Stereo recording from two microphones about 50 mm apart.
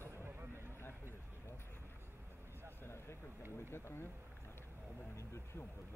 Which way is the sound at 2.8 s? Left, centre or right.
Left.